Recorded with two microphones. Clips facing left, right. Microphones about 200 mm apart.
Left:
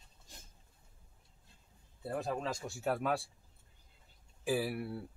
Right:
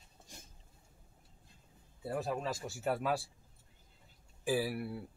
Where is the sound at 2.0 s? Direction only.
5° right (ahead or behind).